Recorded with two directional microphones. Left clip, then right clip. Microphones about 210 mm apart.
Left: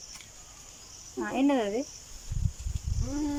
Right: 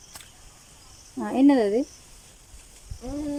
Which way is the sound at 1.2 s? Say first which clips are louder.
Right 7 dB; 25° right (ahead or behind).